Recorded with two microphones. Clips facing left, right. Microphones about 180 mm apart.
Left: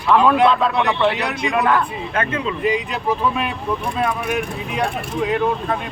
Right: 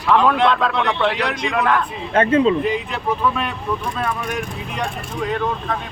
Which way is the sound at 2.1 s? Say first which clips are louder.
Right 10 dB; 30° right (ahead or behind).